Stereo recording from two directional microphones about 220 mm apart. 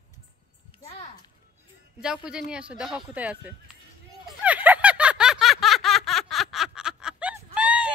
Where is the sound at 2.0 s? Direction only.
5° right (ahead or behind).